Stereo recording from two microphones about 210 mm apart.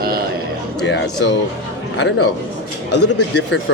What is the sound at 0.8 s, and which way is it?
Speech, 55° left (ahead or behind).